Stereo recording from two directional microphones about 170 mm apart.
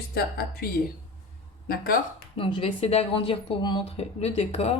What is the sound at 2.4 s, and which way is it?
Speech, 30° left (ahead or behind).